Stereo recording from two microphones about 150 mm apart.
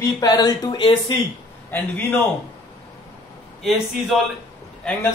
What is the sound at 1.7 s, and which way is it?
Speech, 15° left (ahead or behind).